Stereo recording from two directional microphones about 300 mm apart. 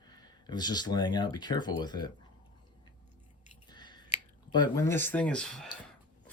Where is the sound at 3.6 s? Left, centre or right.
Centre.